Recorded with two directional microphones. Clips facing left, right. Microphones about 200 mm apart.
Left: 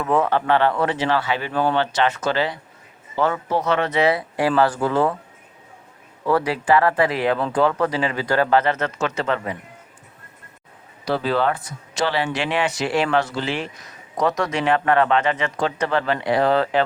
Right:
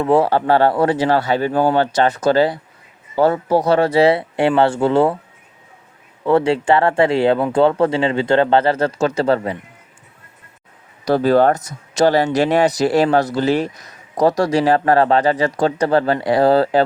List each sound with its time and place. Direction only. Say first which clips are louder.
0.0 s speech: right 5 dB; 30° right (ahead or behind)
6.2 s speech: right 5 dB; 25° right (ahead or behind)
11.0 s speech: right 7 dB; 45° right (ahead or behind)